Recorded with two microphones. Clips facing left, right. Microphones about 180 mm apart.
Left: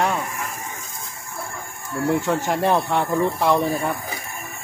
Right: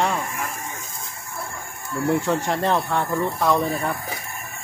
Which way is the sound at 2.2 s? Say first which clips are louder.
Left 1 dB; 5° left (ahead or behind).